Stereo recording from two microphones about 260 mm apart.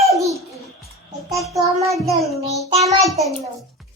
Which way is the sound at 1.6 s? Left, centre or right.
Right.